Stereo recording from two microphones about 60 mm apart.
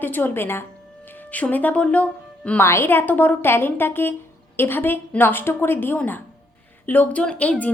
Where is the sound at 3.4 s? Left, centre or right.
Left.